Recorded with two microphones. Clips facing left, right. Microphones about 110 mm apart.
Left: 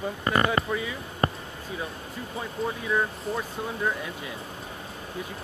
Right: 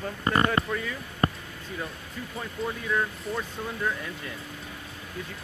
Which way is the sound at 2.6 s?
15° left (ahead or behind).